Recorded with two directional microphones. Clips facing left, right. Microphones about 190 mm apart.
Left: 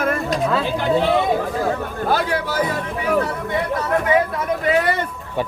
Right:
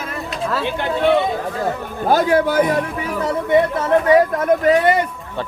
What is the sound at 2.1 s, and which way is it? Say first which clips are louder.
Speech: right 7 dB; 45° right (ahead or behind).